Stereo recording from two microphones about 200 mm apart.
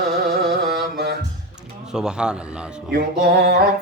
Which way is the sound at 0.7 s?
55° right (ahead or behind).